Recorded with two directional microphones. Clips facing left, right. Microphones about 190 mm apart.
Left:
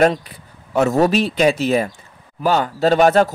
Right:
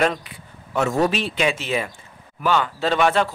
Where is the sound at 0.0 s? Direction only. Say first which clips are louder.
Left 6 dB; 40° left (ahead or behind).